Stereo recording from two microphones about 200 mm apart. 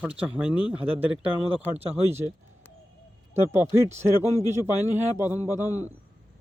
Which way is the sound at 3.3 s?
10° right (ahead or behind).